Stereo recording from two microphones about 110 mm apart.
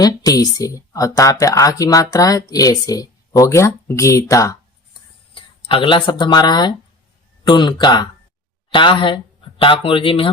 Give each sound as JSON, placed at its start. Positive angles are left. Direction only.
{"t": 0.0, "sound": "speech", "side_deg": 35}
{"t": 5.3, "sound": "speech", "side_deg": 50}